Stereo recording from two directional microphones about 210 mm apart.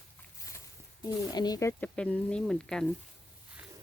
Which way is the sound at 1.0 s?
20° left (ahead or behind).